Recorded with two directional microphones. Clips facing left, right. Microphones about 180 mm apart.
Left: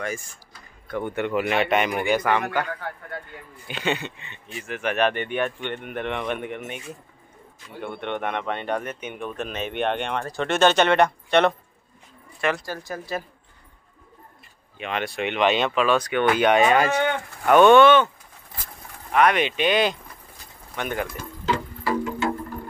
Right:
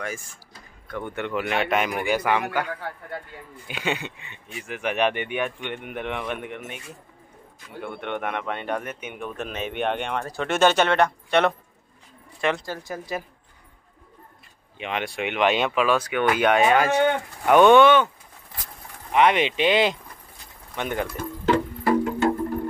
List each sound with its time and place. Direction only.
0.9 s a man's voice: 5° left (ahead or behind)
7.9 s a man's voice: 5° right (ahead or behind)
12.5 s speech: 20° right (ahead or behind)
14.8 s speech: 15° right (ahead or behind)
19.1 s speech: 25° right (ahead or behind)
21.2 s music: 55° right (ahead or behind)